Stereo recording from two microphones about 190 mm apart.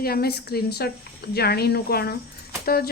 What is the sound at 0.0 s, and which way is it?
Speech, 55° left (ahead or behind).